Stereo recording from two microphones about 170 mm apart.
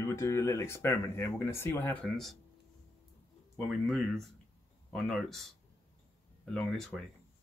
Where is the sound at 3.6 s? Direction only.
Centre (ahead or behind).